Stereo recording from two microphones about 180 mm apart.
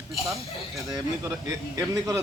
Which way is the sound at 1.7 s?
20° right (ahead or behind).